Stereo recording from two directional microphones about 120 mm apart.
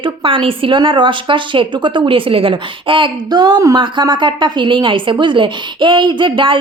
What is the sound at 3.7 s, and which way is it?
Speech, 40° right (ahead or behind).